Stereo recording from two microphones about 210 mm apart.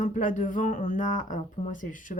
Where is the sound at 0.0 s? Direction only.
40° left (ahead or behind).